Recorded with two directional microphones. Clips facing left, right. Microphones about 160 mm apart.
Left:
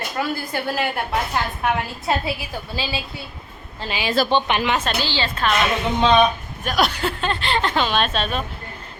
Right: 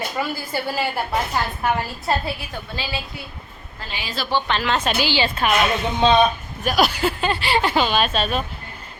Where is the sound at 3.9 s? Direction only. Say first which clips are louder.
Left 8 dB; 90° left.